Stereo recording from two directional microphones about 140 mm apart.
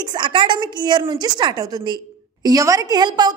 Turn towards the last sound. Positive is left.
turn(degrees=-30)  # may be behind; listen again after turning